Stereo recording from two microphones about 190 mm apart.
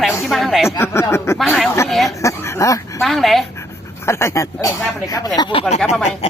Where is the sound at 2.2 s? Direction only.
15° left (ahead or behind).